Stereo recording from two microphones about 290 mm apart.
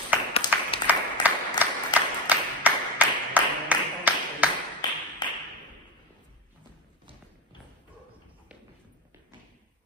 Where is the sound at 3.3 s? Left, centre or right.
Centre.